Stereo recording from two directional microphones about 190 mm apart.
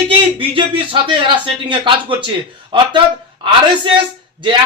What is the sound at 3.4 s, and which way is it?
A man's voice, 25° right (ahead or behind).